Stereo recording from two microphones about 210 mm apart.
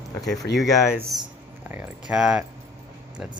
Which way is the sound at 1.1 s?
Centre (ahead or behind).